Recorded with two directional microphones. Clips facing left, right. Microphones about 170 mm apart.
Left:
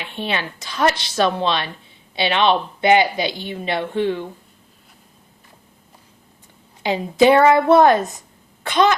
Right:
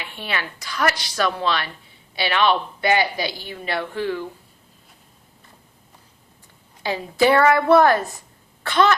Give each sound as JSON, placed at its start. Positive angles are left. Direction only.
{"t": 0.0, "sound": "a woman's voice", "side_deg": 20}
{"t": 6.8, "sound": "a woman's voice", "side_deg": 20}